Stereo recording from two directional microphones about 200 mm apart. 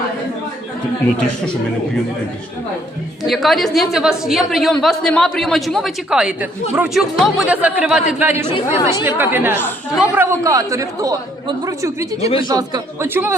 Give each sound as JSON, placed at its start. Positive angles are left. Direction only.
{"t": 3.2, "sound": "a woman's voice", "side_deg": 0}